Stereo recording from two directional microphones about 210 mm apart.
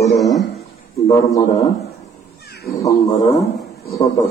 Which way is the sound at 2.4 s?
50° left (ahead or behind).